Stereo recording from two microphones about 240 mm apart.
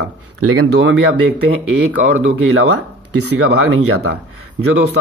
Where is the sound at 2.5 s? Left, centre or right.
Right.